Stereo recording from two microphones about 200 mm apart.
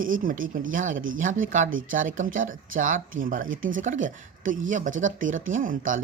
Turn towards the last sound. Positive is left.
turn(degrees=-40)  # may be behind; listen again after turning